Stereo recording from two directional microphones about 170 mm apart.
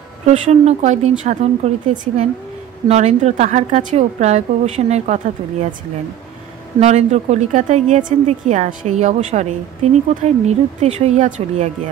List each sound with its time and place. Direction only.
0.2 s a woman's voice: 40° right (ahead or behind)
6.8 s a woman's voice: 40° right (ahead or behind)